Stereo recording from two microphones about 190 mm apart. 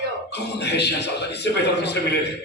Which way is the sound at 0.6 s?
60° left (ahead or behind).